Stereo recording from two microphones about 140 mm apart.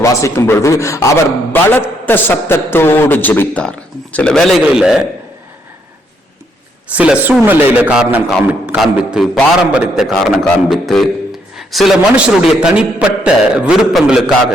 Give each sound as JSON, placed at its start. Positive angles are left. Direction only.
{"t": 0.0, "sound": "a man's voice", "side_deg": 20}
{"t": 6.9, "sound": "a man's voice", "side_deg": -10}